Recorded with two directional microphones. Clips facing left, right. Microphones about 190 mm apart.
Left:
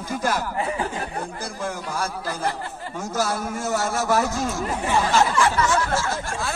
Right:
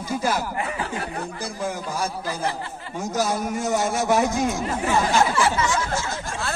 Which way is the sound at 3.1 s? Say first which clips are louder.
Right 1 dB; 15° right (ahead or behind).